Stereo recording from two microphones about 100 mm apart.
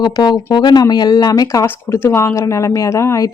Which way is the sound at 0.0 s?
50° left (ahead or behind).